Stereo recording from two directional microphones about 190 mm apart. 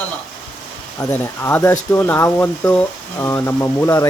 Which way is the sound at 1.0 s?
15° left (ahead or behind).